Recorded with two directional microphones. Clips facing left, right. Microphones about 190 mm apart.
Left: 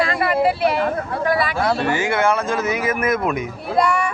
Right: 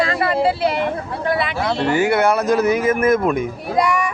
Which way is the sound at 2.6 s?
10° left (ahead or behind).